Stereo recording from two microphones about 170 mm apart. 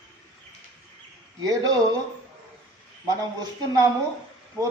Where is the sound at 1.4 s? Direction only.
20° right (ahead or behind).